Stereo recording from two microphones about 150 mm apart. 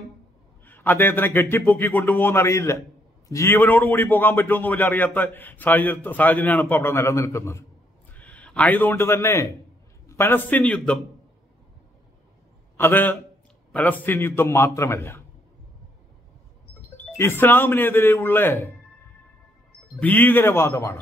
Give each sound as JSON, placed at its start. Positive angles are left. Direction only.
{"t": 0.7, "sound": "a man's voice", "side_deg": 15}
{"t": 12.7, "sound": "a man's voice", "side_deg": 15}
{"t": 17.2, "sound": "a man's voice", "side_deg": 15}
{"t": 20.0, "sound": "a man's voice", "side_deg": 10}